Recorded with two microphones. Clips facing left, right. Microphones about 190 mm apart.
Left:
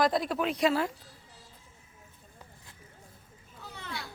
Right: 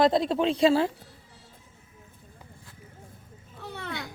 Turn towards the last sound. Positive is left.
turn(degrees=-60)  # may be behind; listen again after turning